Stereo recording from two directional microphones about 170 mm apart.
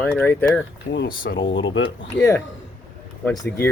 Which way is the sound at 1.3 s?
90° left.